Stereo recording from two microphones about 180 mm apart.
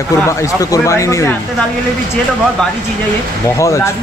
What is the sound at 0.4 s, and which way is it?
Speech, 20° left (ahead or behind).